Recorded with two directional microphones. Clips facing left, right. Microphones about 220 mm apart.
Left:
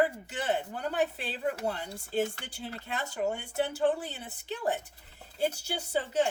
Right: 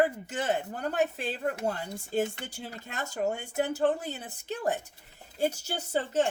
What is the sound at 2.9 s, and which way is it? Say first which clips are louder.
A woman's voice: right 1 dB; 45° right (ahead or behind).